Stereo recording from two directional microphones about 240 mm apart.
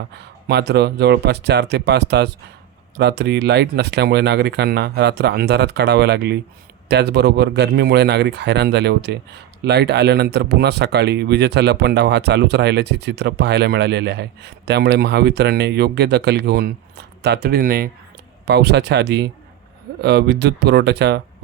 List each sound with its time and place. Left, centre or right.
0.1 s speech: right